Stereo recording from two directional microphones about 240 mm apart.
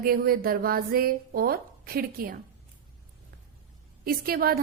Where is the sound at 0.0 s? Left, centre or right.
Right.